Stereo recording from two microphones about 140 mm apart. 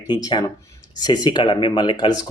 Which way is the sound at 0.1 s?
30° left (ahead or behind).